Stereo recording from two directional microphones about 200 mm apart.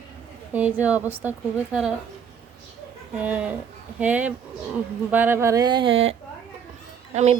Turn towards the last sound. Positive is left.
turn(degrees=-35)  # may be behind; listen again after turning